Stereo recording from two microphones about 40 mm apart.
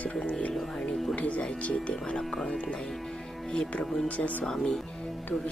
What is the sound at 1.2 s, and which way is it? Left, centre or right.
Speech, left.